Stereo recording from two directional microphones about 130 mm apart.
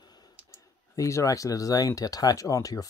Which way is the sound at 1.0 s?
25° left (ahead or behind).